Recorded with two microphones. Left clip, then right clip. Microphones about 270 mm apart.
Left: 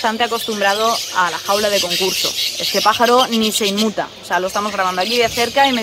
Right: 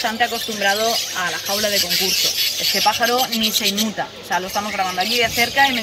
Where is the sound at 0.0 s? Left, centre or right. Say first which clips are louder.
Left 2 dB; centre.